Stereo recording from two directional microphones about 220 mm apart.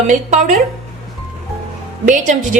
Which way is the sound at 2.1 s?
35° right (ahead or behind).